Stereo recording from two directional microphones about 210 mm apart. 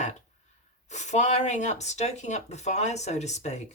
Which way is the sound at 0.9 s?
35° left (ahead or behind).